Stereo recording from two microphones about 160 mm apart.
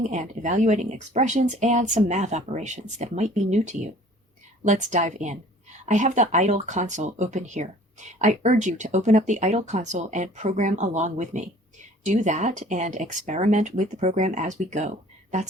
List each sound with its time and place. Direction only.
0.1 s speech: 45° right (ahead or behind)